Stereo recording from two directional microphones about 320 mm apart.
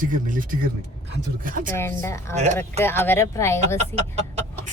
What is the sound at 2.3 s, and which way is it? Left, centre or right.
Speech, right.